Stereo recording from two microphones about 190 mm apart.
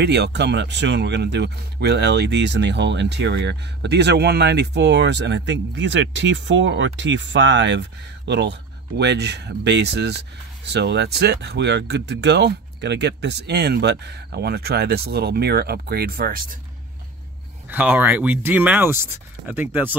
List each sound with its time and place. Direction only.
0.0 s speech: 60° right (ahead or behind)
17.6 s speech: 10° right (ahead or behind)